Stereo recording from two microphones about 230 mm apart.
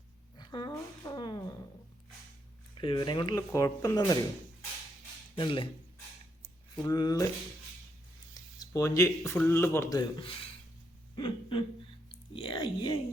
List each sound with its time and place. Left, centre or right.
0.3 s a sound: centre
2.8 s speech: left
5.4 s speech: left
6.8 s speech: centre
8.5 s speech: centre